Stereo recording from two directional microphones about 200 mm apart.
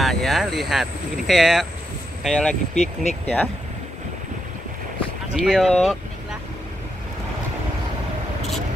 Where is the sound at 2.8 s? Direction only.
35° left (ahead or behind).